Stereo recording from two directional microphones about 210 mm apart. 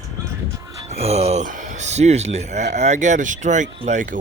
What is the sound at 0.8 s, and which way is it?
Speech, 30° right (ahead or behind).